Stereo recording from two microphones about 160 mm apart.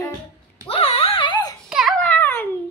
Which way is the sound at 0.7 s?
35° left (ahead or behind).